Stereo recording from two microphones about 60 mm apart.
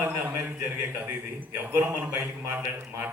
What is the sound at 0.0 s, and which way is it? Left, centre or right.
A man's voice, right.